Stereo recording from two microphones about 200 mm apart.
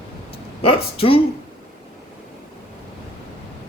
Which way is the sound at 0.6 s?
25° left (ahead or behind).